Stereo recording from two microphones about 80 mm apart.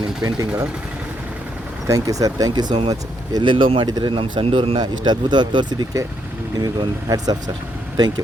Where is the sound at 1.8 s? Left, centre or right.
Right.